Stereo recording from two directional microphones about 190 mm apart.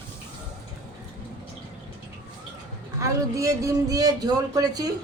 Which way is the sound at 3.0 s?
15° right (ahead or behind).